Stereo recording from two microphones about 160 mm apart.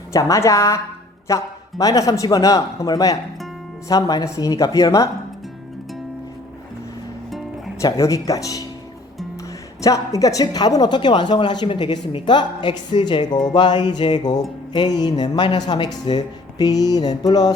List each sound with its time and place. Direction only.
0.1 s music: 20° left (ahead or behind)
1.3 s speech: 20° left (ahead or behind)
1.8 s music: 20° left (ahead or behind)
7.8 s music: 20° left (ahead or behind)
9.8 s music: 20° left (ahead or behind)